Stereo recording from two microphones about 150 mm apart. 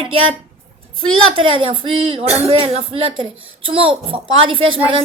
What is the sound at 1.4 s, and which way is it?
Speech, 35° right (ahead or behind).